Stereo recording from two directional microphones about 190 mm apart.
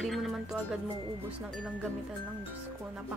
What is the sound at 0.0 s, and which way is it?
Music, centre (ahead or behind).